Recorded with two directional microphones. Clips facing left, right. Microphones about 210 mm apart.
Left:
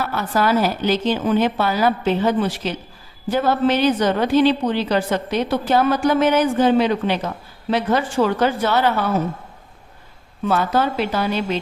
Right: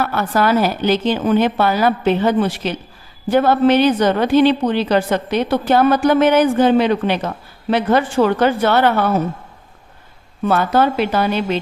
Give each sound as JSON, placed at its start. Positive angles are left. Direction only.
{"t": 0.0, "sound": "a woman's voice", "side_deg": -60}
{"t": 10.4, "sound": "a woman's voice", "side_deg": -60}